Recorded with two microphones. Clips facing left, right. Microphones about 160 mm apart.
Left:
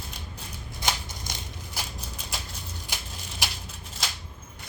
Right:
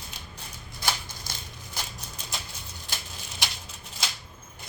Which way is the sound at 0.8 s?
20° left (ahead or behind).